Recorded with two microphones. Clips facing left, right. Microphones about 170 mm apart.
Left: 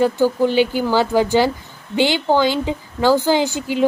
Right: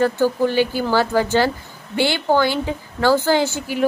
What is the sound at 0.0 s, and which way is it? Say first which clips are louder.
A woman's voice: left 2 dB; 15° left (ahead or behind).